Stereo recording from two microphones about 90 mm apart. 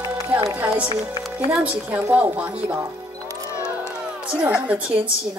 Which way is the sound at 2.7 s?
30° right (ahead or behind).